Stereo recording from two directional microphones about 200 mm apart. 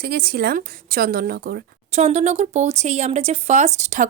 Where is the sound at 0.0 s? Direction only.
50° right (ahead or behind).